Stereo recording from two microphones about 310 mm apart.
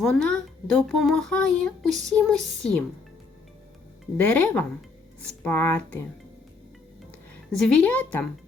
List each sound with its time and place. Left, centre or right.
0.0 s speech: centre
4.2 s speech: centre
7.5 s speech: centre